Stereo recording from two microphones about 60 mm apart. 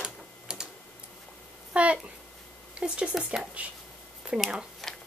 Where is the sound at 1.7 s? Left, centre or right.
Right.